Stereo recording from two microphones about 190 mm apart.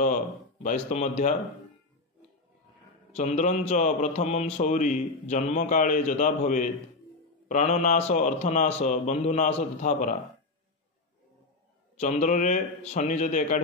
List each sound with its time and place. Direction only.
0.0 s a man's voice: 45° left (ahead or behind)
3.2 s a man's voice: 40° left (ahead or behind)
12.0 s a man's voice: 40° left (ahead or behind)